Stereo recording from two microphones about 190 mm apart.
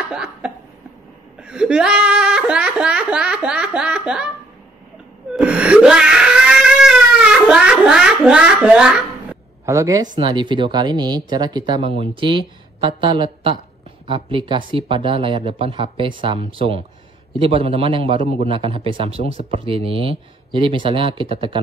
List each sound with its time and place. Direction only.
0.1 s cough: 5° right (ahead or behind)
1.4 s a sound: 5° right (ahead or behind)
5.3 s wail: 5° right (ahead or behind)
10.1 s speech: 25° right (ahead or behind)